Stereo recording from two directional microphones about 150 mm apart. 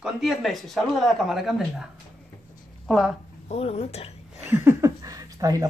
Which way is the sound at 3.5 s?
40° left (ahead or behind).